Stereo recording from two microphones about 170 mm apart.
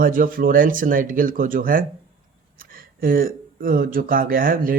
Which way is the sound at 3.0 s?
55° right (ahead or behind).